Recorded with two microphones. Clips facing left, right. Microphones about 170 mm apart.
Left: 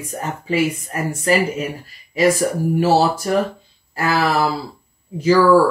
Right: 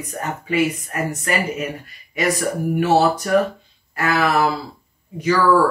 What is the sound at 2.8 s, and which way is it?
Speech, 30° left (ahead or behind).